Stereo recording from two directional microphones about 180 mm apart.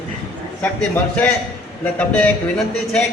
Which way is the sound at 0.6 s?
10° left (ahead or behind).